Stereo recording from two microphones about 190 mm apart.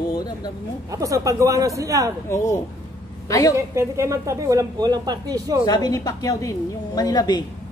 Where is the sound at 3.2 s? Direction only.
15° left (ahead or behind).